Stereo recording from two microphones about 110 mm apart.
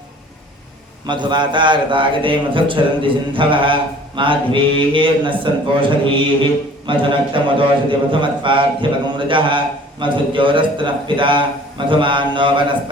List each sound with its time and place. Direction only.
1.0 s a man's voice: 45° right (ahead or behind)